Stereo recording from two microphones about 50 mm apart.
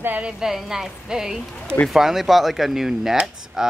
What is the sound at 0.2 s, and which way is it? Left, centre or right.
Speech, centre.